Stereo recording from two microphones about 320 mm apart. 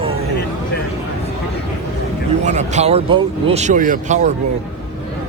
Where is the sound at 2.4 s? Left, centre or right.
Right.